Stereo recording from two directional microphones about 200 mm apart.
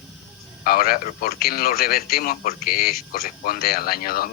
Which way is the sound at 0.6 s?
45° left (ahead or behind).